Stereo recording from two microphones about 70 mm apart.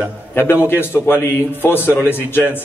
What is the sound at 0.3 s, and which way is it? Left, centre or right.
A man's voice, left.